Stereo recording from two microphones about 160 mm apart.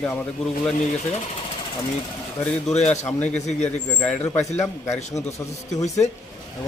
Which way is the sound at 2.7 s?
45° left (ahead or behind).